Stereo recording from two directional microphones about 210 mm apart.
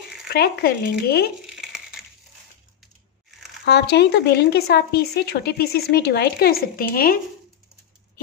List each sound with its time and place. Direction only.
0.3 s speech: 50° left (ahead or behind)
1.4 s crumpling: 5° right (ahead or behind)
3.6 s speech: 50° left (ahead or behind)